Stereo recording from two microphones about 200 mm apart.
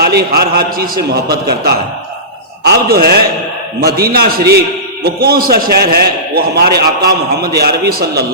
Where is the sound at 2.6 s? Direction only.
50° right (ahead or behind).